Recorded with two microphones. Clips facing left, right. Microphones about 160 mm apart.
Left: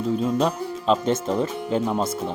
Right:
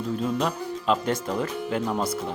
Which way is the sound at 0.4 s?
25° left (ahead or behind).